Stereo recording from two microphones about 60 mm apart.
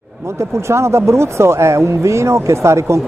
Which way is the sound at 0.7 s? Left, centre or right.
Right.